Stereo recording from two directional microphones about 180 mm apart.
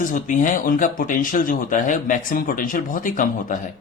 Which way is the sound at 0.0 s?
45° left (ahead or behind).